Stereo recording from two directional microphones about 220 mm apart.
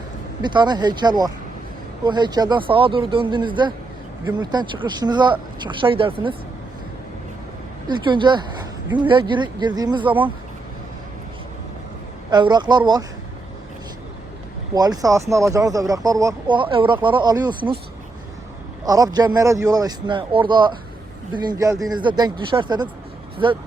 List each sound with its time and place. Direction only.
0.4 s speech: 20° right (ahead or behind)
7.9 s speech: 20° right (ahead or behind)
12.3 s speech: 20° right (ahead or behind)
14.8 s speech: 15° right (ahead or behind)
18.9 s speech: 15° right (ahead or behind)